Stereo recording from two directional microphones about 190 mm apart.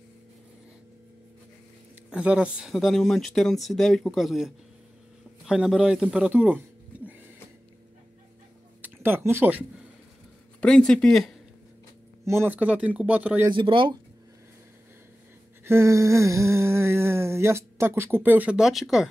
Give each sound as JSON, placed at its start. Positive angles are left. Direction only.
{"t": 2.0, "sound": "speech", "side_deg": -5}
{"t": 8.8, "sound": "speech", "side_deg": -10}
{"t": 10.6, "sound": "speech", "side_deg": 5}
{"t": 12.3, "sound": "a sound", "side_deg": -10}
{"t": 13.5, "sound": "speech", "side_deg": -25}
{"t": 15.6, "sound": "a sound", "side_deg": -15}